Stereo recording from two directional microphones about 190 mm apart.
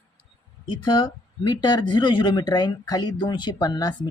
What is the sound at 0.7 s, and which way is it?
Speech, 25° left (ahead or behind).